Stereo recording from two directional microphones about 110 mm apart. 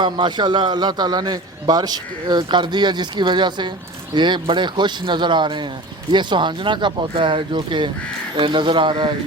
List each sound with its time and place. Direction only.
0.0 s a man's voice: 45° right (ahead or behind)